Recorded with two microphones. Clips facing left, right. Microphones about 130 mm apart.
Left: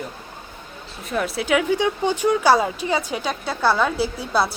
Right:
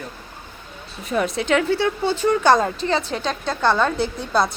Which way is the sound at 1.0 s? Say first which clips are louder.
Right 2 dB; centre (ahead or behind).